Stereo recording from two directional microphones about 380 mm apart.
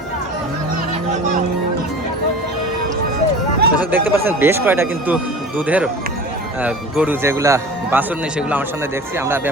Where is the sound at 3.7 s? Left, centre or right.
Centre.